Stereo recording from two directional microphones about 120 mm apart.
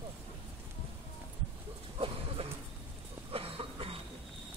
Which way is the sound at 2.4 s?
50° right (ahead or behind).